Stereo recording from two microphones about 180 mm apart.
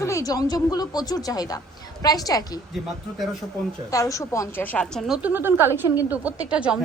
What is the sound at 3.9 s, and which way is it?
A woman's voice, 20° left (ahead or behind).